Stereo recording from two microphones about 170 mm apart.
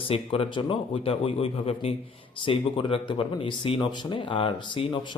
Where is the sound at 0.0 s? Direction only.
35° left (ahead or behind).